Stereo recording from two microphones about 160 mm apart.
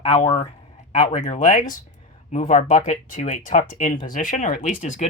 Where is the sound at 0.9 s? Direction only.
50° left (ahead or behind).